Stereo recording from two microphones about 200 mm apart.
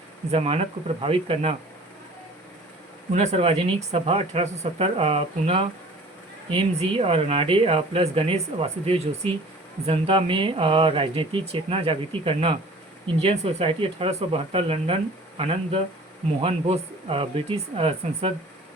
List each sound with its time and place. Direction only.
0.3 s speech: 30° right (ahead or behind)
3.1 s speech: 30° right (ahead or behind)